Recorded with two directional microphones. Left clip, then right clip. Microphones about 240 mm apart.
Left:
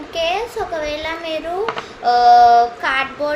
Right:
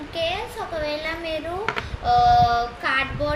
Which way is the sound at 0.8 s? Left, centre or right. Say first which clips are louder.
Left 4 dB; centre.